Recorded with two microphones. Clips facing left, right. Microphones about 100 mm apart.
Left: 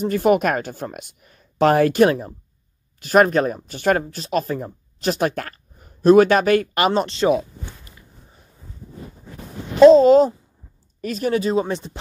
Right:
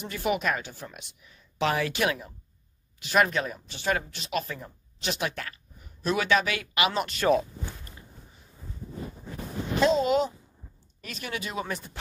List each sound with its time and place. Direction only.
0.0 s speech: 45° left (ahead or behind)
9.8 s speech: 35° left (ahead or behind)